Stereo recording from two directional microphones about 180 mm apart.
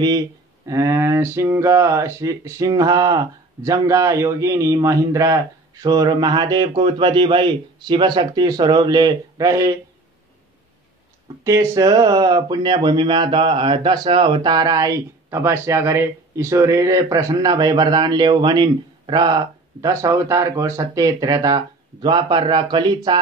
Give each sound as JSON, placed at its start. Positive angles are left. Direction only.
{"t": 0.7, "sound": "speech", "side_deg": -15}
{"t": 11.4, "sound": "speech", "side_deg": -20}